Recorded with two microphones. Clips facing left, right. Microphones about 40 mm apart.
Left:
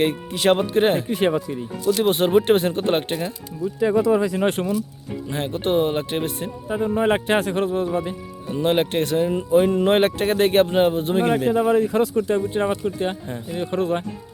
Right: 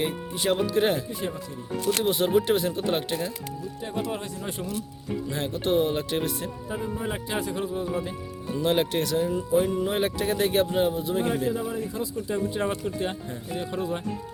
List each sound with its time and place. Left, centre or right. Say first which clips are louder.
0.0 s speech: left 8 dB; left
0.7 s speech: left 5 dB; left
1.0 s speech: left 11 dB; left
1.8 s speech: left 6 dB; right
2.0 s speech: left 6 dB; left
4.4 s speech: left 11 dB; left
5.3 s speech: left 4 dB; left
6.8 s speech: left 14 dB; left
7.9 s speech: left 5 dB; left
9.7 s speech: left 8 dB; left
11.8 s speech: left 11 dB; left
12.5 s speech: left 6 dB; left
13.7 s speech: left 9 dB; left